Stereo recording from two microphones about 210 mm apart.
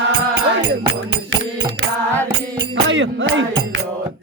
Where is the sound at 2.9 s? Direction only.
65° right (ahead or behind).